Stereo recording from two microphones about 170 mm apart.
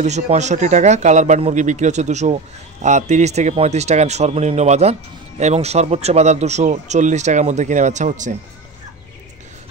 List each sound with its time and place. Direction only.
0.0 s a man's voice: 40° right (ahead or behind)